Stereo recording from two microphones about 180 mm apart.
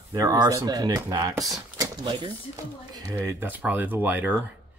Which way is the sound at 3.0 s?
15° right (ahead or behind).